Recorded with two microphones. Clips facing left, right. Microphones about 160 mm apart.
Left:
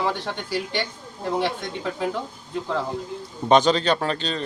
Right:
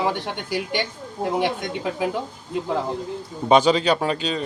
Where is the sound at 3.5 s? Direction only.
10° right (ahead or behind).